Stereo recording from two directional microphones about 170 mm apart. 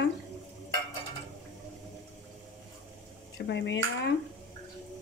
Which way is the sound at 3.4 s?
90° left.